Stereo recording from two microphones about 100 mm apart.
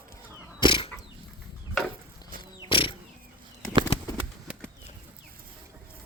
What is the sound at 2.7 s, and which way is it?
Vehicle, 60° left (ahead or behind).